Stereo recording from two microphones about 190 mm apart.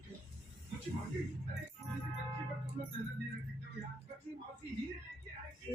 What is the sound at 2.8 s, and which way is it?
Music, 35° right (ahead or behind).